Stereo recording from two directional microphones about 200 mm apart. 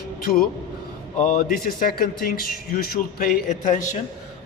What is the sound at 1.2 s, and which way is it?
A man's voice, 45° left (ahead or behind).